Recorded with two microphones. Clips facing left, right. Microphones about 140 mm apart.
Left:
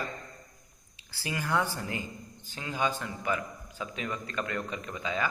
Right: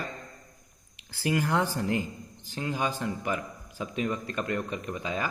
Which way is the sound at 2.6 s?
45° right (ahead or behind).